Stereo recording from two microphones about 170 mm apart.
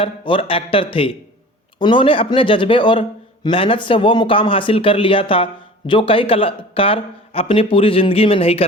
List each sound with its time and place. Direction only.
0.0 s speech: 30° left (ahead or behind)